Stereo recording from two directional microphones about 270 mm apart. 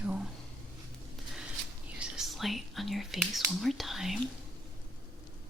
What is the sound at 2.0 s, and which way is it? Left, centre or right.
Whispering, centre.